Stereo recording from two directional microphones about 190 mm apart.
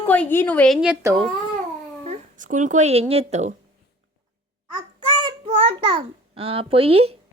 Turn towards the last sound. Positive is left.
turn(degrees=-30)  # may be behind; listen again after turning